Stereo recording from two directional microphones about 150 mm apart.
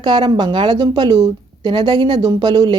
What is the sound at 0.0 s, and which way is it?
A woman's voice, 30° right (ahead or behind).